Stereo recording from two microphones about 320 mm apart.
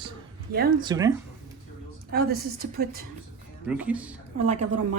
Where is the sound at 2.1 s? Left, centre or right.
Right.